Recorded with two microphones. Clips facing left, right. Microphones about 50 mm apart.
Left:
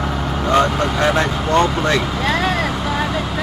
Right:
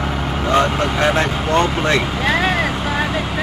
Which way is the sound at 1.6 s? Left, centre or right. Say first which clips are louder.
Even; right.